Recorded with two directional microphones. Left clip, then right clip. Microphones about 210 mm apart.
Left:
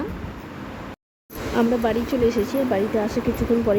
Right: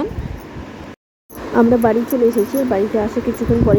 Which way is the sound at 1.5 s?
20° right (ahead or behind).